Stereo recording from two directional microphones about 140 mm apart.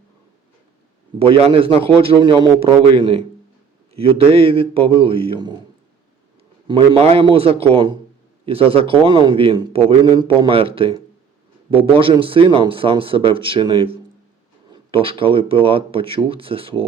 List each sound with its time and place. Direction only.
1.3 s a man's voice: 40° right (ahead or behind)
6.7 s a man's voice: 40° right (ahead or behind)